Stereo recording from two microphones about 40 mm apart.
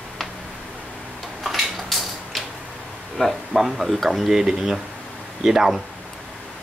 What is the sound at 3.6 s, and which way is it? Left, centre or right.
Speech, centre.